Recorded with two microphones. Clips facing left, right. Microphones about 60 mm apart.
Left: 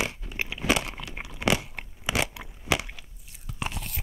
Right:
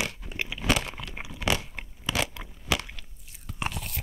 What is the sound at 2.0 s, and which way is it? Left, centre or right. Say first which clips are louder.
Scissors: left 2 dB; centre.